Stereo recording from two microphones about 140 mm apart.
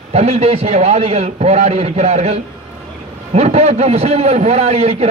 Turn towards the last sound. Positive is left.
turn(degrees=-50)  # may be behind; listen again after turning